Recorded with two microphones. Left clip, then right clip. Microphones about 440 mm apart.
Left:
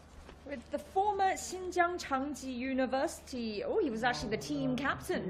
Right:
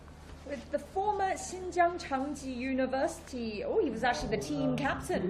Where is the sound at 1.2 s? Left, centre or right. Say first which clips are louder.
Left 1 dB; left.